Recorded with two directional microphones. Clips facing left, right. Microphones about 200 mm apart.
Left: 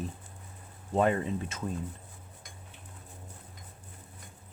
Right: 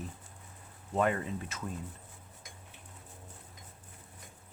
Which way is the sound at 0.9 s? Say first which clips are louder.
Left 4 dB; 30° left (ahead or behind).